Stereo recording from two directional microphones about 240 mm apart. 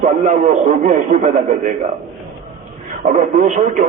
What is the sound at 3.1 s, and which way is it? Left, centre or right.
Speech, right.